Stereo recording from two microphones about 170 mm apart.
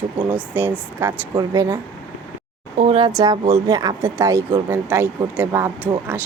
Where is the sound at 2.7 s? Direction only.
35° right (ahead or behind).